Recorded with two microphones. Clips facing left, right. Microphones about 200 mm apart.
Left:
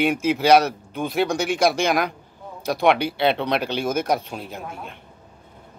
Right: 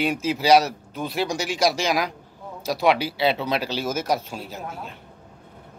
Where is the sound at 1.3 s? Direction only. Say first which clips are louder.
Left 3 dB; 55° left (ahead or behind).